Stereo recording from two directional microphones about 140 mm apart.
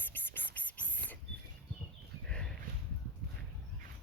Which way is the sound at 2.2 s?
5° left (ahead or behind).